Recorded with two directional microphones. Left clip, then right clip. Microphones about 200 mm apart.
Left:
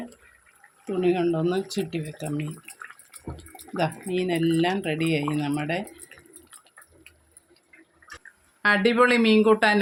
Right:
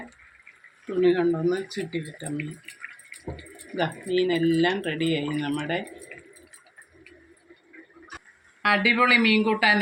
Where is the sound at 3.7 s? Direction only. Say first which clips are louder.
Right 1 dB; 50° left (ahead or behind).